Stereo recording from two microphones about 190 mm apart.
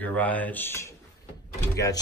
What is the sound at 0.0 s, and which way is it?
Speech, 10° left (ahead or behind).